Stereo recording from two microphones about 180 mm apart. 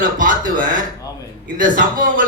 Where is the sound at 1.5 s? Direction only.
50° right (ahead or behind).